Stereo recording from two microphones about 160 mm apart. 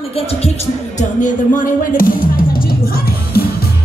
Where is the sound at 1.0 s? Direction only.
50° left (ahead or behind).